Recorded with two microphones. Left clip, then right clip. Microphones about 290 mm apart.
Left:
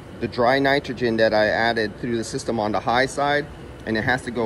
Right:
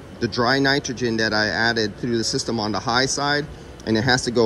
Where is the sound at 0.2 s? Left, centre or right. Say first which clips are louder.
Left 1 dB; centre.